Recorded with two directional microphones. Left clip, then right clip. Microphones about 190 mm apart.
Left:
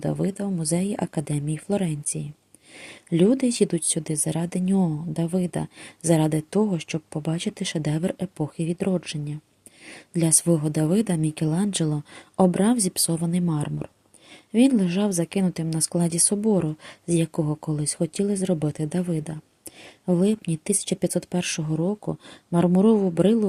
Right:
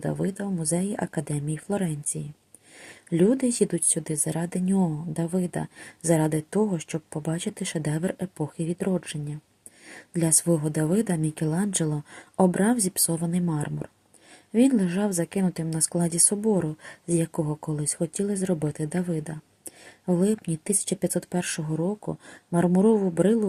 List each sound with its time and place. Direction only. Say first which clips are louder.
0.0 s speech: left 2 dB; 25° left (ahead or behind)